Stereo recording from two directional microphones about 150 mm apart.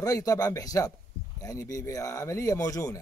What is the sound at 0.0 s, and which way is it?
A man's voice, 25° left (ahead or behind).